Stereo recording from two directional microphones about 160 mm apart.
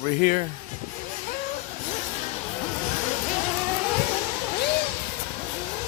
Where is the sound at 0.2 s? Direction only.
50° left (ahead or behind).